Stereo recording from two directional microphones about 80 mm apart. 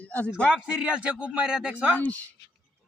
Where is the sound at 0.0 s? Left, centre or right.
Left.